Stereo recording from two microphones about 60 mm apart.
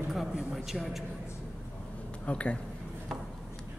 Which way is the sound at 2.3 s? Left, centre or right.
Left.